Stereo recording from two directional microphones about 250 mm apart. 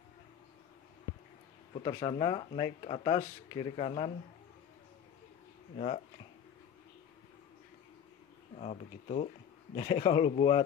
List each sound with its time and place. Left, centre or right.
1.7 s speech: left
8.5 s speech: left